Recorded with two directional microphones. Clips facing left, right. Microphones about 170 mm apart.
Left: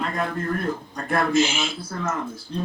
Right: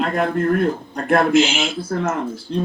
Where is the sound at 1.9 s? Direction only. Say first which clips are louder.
Right 12 dB; 65° right (ahead or behind).